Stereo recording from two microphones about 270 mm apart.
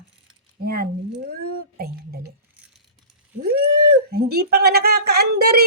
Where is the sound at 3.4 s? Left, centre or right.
Right.